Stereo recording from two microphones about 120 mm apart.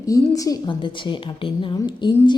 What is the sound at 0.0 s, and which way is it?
A woman's voice, 30° left (ahead or behind).